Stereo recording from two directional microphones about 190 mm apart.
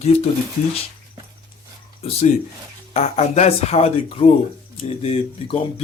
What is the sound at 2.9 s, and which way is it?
Speech, 35° left (ahead or behind).